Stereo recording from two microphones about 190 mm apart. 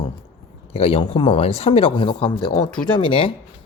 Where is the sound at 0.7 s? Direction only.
30° left (ahead or behind).